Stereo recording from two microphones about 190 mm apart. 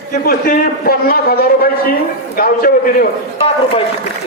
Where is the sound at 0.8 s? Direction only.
50° left (ahead or behind).